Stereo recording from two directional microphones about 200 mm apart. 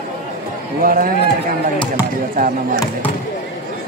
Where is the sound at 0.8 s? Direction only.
45° right (ahead or behind).